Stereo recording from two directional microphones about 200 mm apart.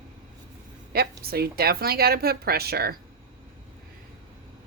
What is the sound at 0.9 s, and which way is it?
A woman's voice, 50° right (ahead or behind).